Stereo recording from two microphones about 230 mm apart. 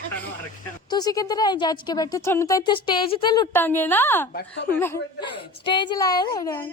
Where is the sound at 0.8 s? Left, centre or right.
Centre.